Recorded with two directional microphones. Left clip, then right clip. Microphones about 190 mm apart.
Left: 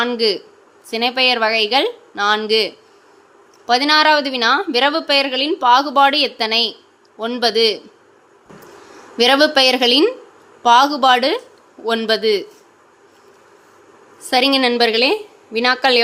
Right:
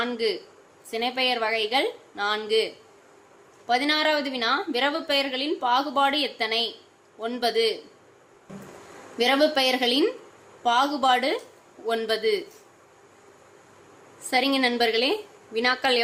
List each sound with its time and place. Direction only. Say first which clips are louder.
0.0 s a woman's voice: left 9 dB; 25° left (ahead or behind)
9.1 s a woman's voice: left 9 dB; 20° left (ahead or behind)
14.3 s a woman's voice: left 8 dB; 25° left (ahead or behind)